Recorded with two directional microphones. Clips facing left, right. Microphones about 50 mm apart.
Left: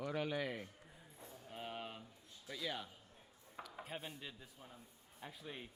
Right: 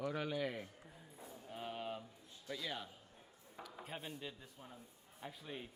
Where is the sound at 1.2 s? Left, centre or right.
Centre.